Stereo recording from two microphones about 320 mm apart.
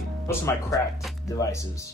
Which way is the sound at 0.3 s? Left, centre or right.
Centre.